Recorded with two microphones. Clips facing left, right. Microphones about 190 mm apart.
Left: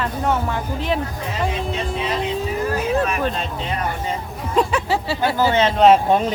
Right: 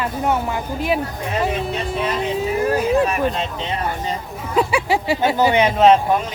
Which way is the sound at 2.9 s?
15° right (ahead or behind).